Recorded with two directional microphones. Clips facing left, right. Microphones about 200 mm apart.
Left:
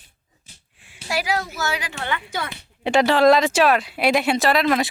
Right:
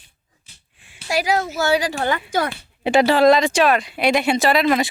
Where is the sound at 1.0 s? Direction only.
20° right (ahead or behind).